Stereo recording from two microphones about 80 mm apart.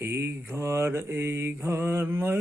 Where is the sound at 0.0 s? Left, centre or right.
Right.